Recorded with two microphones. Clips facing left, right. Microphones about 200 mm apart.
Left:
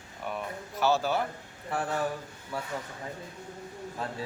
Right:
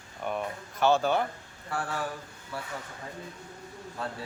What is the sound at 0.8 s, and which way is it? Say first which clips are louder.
Speech: right 2 dB; 5° left (ahead or behind).